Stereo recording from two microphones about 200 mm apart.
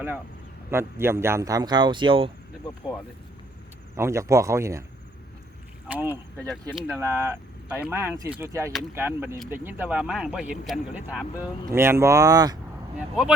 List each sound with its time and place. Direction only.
0.7 s speech: 10° right (ahead or behind)
3.9 s speech: 15° right (ahead or behind)
5.9 s speech: 10° right (ahead or behind)
7.0 s speech: 15° right (ahead or behind)